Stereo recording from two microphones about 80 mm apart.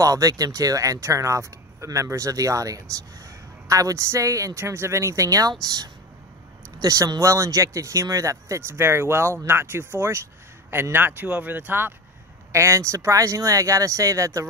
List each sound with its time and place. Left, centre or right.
0.0 s speech: right
12.5 s speech: right